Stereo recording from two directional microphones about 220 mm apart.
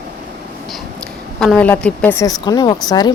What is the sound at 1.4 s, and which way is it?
A woman's voice, 5° left (ahead or behind).